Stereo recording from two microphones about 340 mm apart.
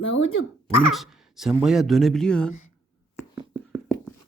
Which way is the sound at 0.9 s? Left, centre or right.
Centre.